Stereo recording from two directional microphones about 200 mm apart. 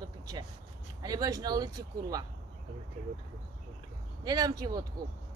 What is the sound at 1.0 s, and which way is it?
Speech, 20° right (ahead or behind).